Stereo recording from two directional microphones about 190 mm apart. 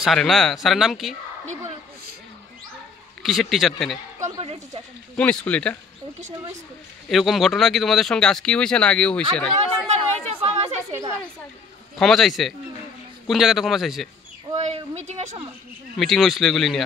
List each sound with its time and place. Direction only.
0.0 s speech: centre (ahead or behind)
3.2 s speech: centre (ahead or behind)
4.2 s speech: 30° right (ahead or behind)
5.1 s speech: 5° left (ahead or behind)
7.1 s speech: centre (ahead or behind)
9.8 s chatter: 35° right (ahead or behind)
12.0 s speech: centre (ahead or behind)
14.5 s speech: 35° right (ahead or behind)
16.0 s speech: centre (ahead or behind)